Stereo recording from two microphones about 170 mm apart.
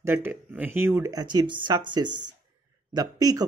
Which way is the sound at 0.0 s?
15° right (ahead or behind).